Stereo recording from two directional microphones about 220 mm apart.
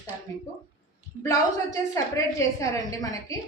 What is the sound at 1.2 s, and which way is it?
A woman's voice, 15° left (ahead or behind).